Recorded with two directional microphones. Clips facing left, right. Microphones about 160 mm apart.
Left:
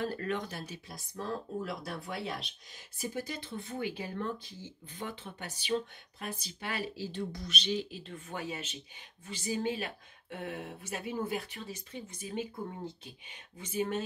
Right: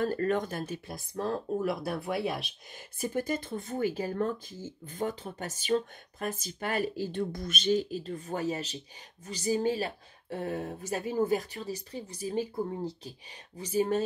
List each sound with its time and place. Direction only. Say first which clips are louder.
0.0 s a woman's voice: right 6 dB; 45° right (ahead or behind)